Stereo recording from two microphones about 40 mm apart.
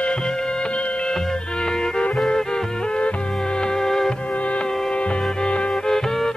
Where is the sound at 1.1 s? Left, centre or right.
Centre.